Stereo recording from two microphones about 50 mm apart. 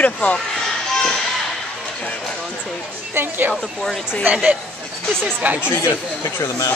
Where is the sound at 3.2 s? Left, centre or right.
Right.